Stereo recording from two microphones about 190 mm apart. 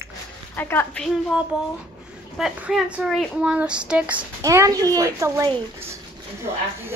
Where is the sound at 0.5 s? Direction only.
10° left (ahead or behind); by 4.3 s 5° right (ahead or behind).